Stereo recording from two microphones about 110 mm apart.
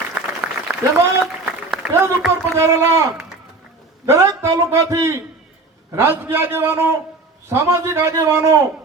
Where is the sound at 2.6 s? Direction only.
25° right (ahead or behind).